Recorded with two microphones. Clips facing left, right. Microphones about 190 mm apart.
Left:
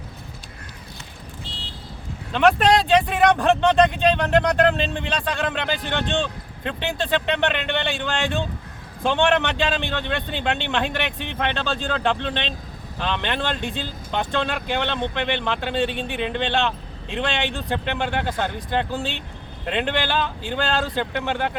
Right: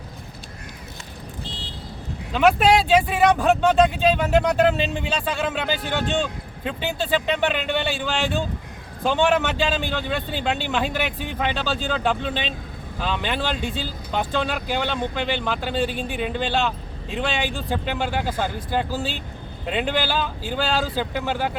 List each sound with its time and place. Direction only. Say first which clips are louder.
2.3 s speech: even; 5° right (ahead or behind)